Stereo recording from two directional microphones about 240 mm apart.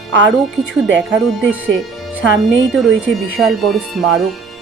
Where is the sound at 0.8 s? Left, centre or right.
Centre.